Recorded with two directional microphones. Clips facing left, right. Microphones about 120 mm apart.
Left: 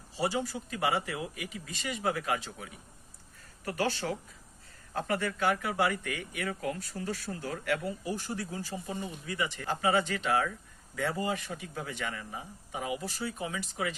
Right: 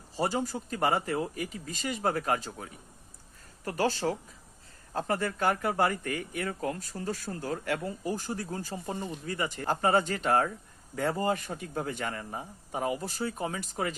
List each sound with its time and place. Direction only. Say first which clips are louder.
0.2 s speech: right 2 dB; 45° right (ahead or behind)